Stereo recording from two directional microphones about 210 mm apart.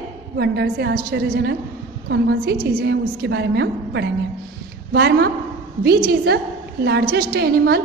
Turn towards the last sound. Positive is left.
turn(degrees=-50)  # may be behind; listen again after turning